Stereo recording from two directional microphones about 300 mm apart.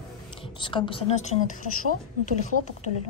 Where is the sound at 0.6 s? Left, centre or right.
Centre.